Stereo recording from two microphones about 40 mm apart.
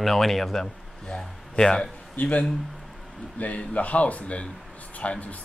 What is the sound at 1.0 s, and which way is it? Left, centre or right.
Speech, left.